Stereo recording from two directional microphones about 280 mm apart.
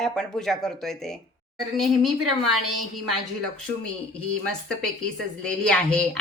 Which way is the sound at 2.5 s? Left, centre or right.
Right.